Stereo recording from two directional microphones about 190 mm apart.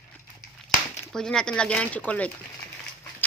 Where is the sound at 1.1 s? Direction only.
5° left (ahead or behind).